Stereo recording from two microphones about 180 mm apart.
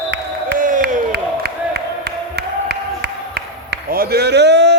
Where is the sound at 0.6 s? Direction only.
50° right (ahead or behind).